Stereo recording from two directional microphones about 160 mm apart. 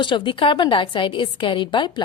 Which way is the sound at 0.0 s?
30° left (ahead or behind).